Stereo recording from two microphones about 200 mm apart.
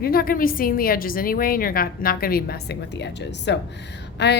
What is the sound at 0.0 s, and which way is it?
A woman's voice, 50° left (ahead or behind).